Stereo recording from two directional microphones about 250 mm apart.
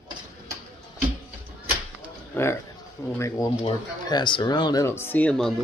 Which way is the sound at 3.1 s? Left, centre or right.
Centre.